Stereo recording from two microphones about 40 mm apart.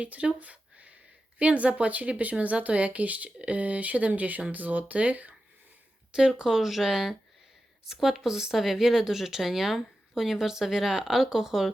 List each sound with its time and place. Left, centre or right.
0.0 s speech: right
3.2 s speech: right
3.5 s speech: right
6.1 s speech: centre